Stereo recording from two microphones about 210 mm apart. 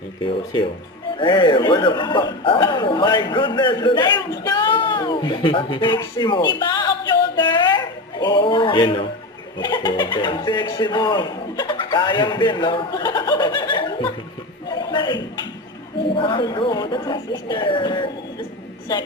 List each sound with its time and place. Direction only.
1.2 s a man's voice: 20° left (ahead or behind)
6.6 s music: 20° left (ahead or behind)
7.3 s a sound: 20° left (ahead or behind)
9.6 s speech: 20° left (ahead or behind)
14.7 s a sound: 20° left (ahead or behind)
16.1 s a man's voice: 25° left (ahead or behind)